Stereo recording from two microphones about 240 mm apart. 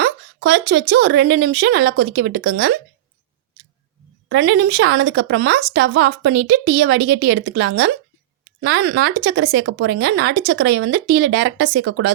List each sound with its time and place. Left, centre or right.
0.0 s speech: right
4.3 s speech: right